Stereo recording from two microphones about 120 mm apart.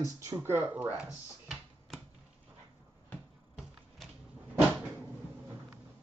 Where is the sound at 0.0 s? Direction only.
25° right (ahead or behind).